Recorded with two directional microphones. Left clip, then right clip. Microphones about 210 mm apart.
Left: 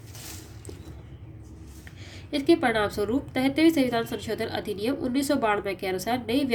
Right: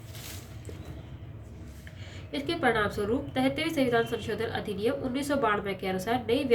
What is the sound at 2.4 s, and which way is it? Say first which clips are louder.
Speech: left 4 dB; 40° left (ahead or behind).